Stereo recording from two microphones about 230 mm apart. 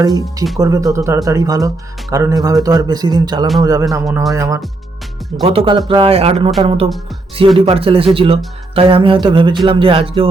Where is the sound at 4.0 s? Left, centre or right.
Centre.